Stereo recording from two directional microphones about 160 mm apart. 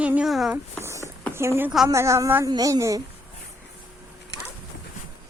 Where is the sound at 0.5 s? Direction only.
15° right (ahead or behind).